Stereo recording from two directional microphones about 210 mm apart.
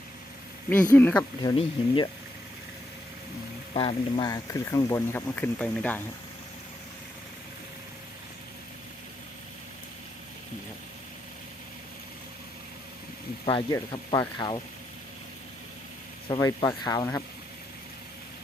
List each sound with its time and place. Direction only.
0.9 s speech: 10° left (ahead or behind)
1.4 s speech: 20° left (ahead or behind)
3.8 s speech: 25° left (ahead or behind); by 6.0 s 5° left (ahead or behind)
13.4 s speech: 25° left (ahead or behind)
16.3 s speech: 20° left (ahead or behind)